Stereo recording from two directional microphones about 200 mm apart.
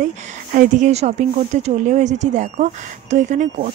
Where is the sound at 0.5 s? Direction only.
40° right (ahead or behind).